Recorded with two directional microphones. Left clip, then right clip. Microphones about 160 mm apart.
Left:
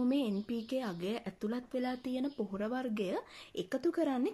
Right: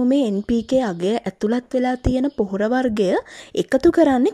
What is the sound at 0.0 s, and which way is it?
Speech, 45° right (ahead or behind).